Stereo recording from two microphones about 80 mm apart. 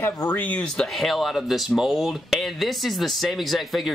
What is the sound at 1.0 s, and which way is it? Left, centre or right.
Speech, centre.